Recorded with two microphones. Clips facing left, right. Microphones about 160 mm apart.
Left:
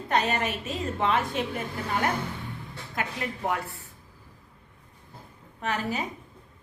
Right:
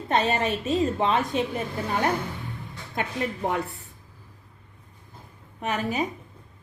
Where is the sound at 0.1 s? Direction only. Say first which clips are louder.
Right 3 dB; 25° right (ahead or behind).